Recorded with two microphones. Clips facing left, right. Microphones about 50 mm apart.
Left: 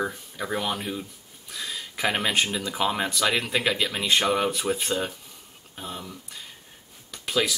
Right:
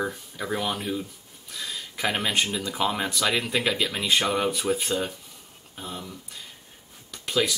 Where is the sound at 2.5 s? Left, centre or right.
Centre.